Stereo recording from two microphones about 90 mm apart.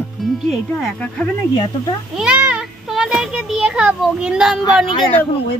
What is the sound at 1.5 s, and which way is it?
Speech, 45° left (ahead or behind).